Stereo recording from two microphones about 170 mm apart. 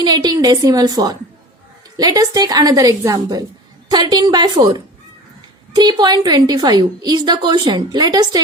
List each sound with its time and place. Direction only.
0.0 s a woman's voice: 25° right (ahead or behind)